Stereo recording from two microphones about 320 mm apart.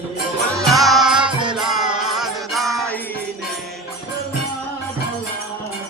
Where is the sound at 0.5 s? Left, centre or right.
Centre.